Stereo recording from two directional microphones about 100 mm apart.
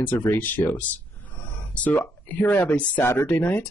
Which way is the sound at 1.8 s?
15° left (ahead or behind).